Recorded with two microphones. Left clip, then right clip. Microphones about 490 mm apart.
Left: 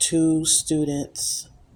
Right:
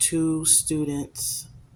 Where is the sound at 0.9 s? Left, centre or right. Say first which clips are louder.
Left 3 dB; right.